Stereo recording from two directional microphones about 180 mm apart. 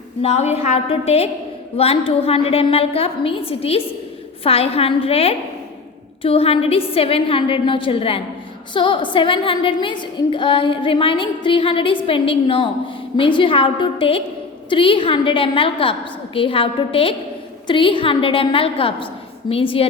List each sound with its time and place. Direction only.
0.2 s a woman's voice: 35° left (ahead or behind)